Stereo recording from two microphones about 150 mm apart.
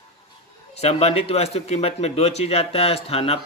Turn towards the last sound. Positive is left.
turn(degrees=40)  # may be behind; listen again after turning